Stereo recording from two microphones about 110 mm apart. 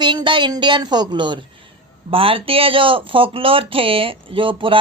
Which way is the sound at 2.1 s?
55° right (ahead or behind).